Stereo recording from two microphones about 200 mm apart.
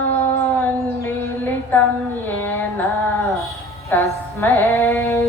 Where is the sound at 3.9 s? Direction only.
10° left (ahead or behind).